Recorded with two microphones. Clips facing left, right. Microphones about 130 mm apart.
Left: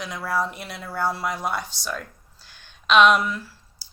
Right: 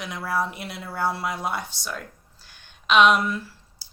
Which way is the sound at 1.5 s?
55° right (ahead or behind).